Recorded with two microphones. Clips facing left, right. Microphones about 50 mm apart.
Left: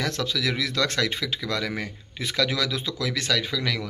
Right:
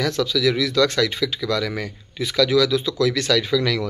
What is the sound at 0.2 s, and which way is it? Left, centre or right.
Speech, left.